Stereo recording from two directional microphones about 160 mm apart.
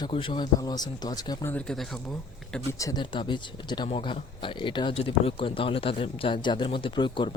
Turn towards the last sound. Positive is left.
turn(degrees=30)  # may be behind; listen again after turning